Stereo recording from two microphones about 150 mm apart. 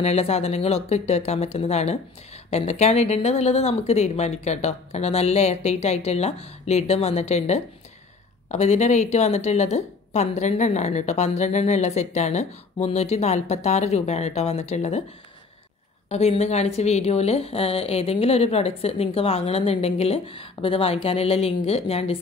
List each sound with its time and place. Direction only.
0.0 s a woman's voice: 45° left (ahead or behind)
16.1 s a woman's voice: 45° left (ahead or behind)